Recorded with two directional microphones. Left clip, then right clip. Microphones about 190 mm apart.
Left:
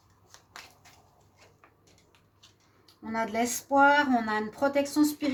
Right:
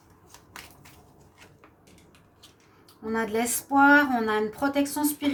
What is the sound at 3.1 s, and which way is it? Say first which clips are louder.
Speech: right 2 dB; 35° left (ahead or behind).